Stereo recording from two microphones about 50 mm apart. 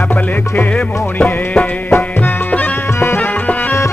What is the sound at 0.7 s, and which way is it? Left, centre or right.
Music, left.